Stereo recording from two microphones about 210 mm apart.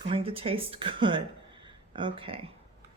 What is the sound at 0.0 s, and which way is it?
Speech, 25° right (ahead or behind).